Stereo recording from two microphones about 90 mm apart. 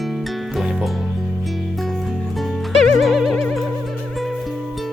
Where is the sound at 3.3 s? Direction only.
5° left (ahead or behind).